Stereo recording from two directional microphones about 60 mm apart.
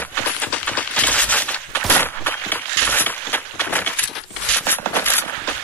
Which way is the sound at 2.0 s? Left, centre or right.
Left.